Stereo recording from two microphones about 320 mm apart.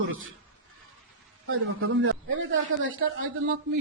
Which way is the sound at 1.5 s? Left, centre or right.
Right.